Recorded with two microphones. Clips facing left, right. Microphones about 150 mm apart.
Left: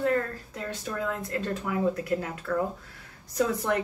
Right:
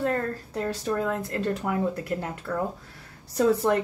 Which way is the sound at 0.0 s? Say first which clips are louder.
Even; 40° right (ahead or behind).